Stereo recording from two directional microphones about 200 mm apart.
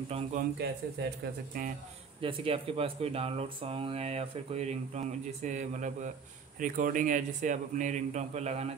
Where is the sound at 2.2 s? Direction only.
30° right (ahead or behind).